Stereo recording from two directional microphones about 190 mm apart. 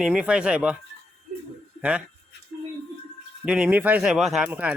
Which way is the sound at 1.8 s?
5° right (ahead or behind).